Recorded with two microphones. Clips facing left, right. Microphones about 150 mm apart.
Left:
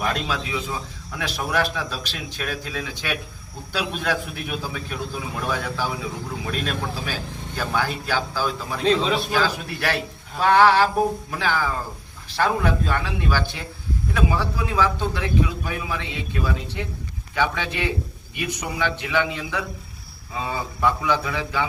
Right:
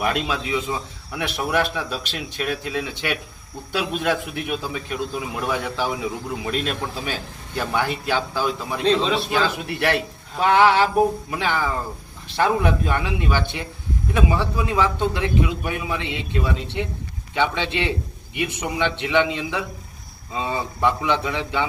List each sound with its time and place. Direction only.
0.0 s a man's voice: 20° right (ahead or behind)
8.8 s a man's voice: centre (ahead or behind)
9.5 s a man's voice: 25° right (ahead or behind)